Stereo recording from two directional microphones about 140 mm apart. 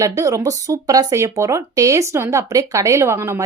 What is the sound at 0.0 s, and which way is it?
Speech, 20° right (ahead or behind).